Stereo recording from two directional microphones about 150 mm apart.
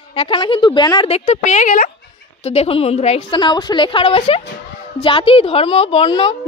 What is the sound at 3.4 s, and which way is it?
A woman's voice, 30° left (ahead or behind).